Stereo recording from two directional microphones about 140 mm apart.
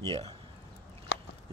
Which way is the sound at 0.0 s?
45° right (ahead or behind).